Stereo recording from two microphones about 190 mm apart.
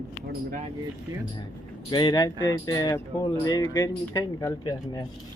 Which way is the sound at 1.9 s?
25° left (ahead or behind).